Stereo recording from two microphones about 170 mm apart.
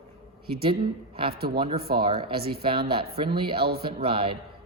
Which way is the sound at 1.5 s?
30° right (ahead or behind).